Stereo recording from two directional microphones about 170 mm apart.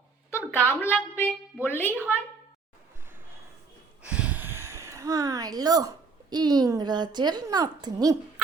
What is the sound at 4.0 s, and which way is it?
Speech, 5° right (ahead or behind).